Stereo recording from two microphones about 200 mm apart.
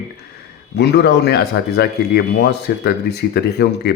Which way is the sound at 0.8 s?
55° left (ahead or behind).